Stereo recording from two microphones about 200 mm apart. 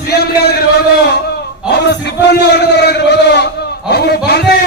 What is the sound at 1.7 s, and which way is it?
A man's voice, 55° left (ahead or behind).